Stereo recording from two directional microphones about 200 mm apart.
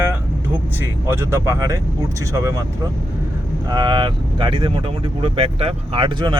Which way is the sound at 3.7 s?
20° right (ahead or behind).